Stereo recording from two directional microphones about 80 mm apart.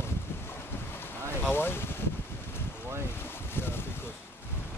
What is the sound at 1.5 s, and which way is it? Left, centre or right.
Speech, left.